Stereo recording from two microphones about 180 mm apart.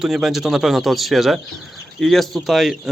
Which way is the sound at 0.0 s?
Centre (ahead or behind).